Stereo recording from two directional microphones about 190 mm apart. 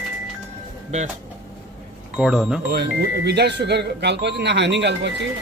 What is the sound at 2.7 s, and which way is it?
Speech, 60° right (ahead or behind).